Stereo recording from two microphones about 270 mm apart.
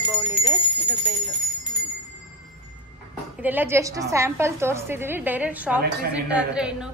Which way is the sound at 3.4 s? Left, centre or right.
Centre.